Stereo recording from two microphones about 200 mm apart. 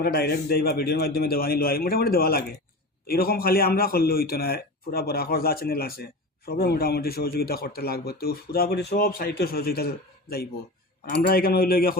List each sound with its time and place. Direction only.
0.0 s a man's voice: 50° left (ahead or behind)